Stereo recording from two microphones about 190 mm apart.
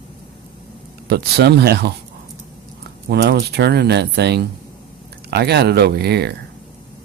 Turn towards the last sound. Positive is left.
turn(degrees=-60)  # may be behind; listen again after turning